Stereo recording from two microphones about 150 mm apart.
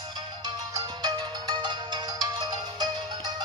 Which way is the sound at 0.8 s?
25° right (ahead or behind).